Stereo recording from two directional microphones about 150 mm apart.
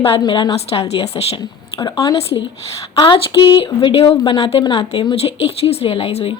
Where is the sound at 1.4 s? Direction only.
30° left (ahead or behind).